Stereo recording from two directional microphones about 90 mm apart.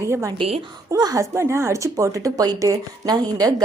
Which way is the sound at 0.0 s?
30° right (ahead or behind).